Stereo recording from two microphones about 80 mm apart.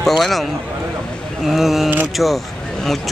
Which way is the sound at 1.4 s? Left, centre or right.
Centre.